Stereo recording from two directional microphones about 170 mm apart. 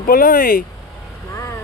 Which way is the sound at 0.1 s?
55° left (ahead or behind).